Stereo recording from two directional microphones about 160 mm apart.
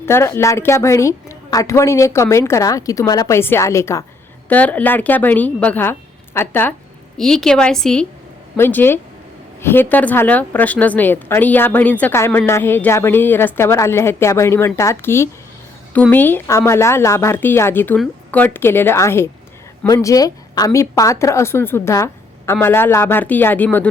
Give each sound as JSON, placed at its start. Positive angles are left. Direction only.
{"t": 0.0, "sound": "a woman's voice", "side_deg": 15}
{"t": 7.2, "sound": "a woman's voice", "side_deg": 5}